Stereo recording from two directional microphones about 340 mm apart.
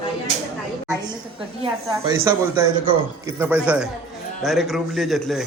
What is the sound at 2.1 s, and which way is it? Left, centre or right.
Speech, centre.